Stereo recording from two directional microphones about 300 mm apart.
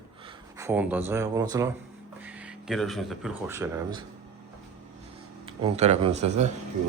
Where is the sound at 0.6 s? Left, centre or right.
Centre.